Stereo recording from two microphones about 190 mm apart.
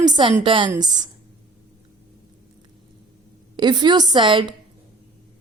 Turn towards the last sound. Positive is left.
turn(degrees=-25)  # may be behind; listen again after turning